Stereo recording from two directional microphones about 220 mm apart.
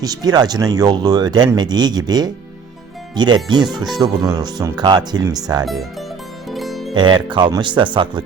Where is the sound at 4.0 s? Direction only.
15° right (ahead or behind).